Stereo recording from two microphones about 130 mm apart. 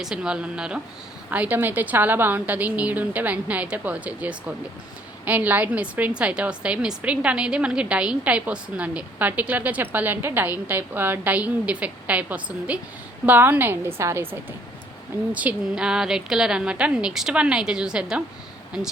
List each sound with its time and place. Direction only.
0.0 s a woman's voice: 5° right (ahead or behind)